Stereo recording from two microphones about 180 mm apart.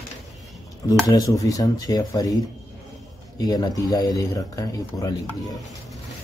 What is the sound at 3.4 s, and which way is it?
Speech, 20° left (ahead or behind).